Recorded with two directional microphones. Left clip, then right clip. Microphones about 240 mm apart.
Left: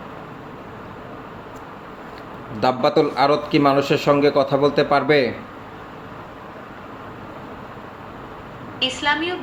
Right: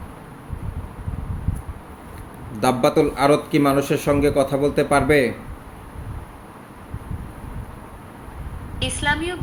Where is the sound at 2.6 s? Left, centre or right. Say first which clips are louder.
Even; centre.